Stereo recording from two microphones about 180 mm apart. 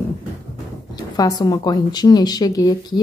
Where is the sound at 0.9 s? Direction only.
20° left (ahead or behind).